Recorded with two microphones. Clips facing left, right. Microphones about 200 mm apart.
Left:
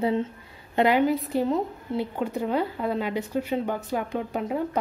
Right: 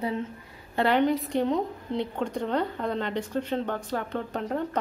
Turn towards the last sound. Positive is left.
turn(degrees=10)  # may be behind; listen again after turning